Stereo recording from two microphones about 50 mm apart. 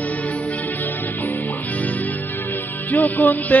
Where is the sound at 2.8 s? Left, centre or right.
Left.